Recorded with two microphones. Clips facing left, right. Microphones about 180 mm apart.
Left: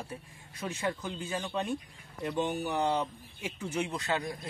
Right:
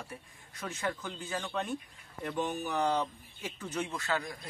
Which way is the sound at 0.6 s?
20° left (ahead or behind).